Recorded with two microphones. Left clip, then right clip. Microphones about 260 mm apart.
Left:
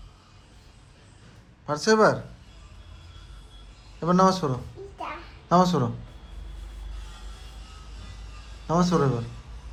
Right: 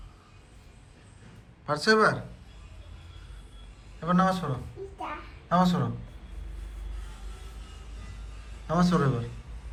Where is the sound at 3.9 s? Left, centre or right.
Centre.